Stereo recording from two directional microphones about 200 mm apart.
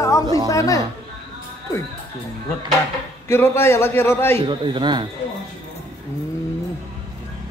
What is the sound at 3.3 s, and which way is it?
A man's voice, 10° left (ahead or behind).